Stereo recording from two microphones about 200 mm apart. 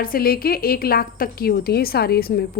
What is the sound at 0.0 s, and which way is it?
A woman's voice, 45° left (ahead or behind).